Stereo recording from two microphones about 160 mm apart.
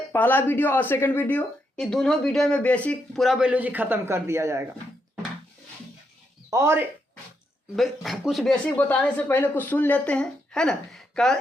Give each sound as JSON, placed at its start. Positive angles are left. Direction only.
{"t": 0.1, "sound": "a woman's voice", "side_deg": 10}
{"t": 6.5, "sound": "speech", "side_deg": -15}
{"t": 7.8, "sound": "speech", "side_deg": 0}